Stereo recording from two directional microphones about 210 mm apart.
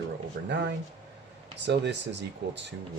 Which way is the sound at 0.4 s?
50° right (ahead or behind).